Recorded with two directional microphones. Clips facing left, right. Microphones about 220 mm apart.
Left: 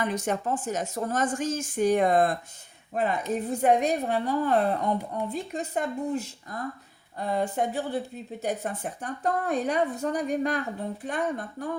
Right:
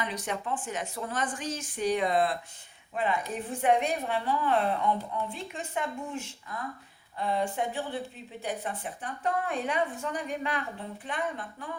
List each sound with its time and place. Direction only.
0.0 s a woman's voice: 45° left (ahead or behind)